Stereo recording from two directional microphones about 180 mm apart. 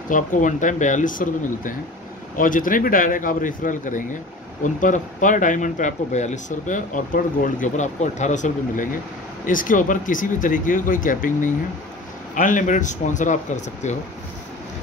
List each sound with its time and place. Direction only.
0.1 s speech: 45° left (ahead or behind)